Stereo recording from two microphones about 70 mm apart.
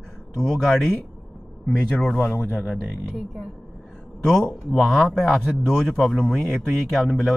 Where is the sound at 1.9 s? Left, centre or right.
Left.